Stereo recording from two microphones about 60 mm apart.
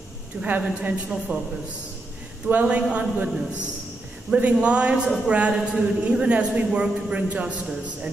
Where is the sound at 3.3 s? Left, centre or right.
Centre.